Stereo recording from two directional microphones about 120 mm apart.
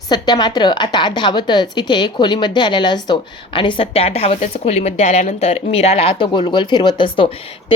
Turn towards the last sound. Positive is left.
turn(degrees=45)  # may be behind; listen again after turning